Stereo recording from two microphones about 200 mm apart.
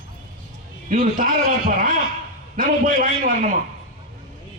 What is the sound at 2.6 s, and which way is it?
Speech, 45° right (ahead or behind).